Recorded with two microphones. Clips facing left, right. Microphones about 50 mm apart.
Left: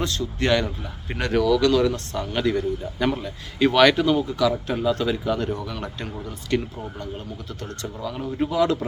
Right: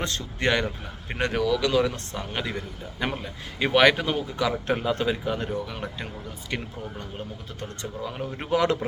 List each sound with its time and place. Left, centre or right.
0.0 s speech: right
1.3 s speech: centre
7.8 s speech: right
8.4 s speech: right